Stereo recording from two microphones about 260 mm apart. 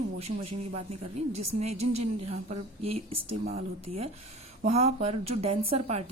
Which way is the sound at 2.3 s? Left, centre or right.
Right.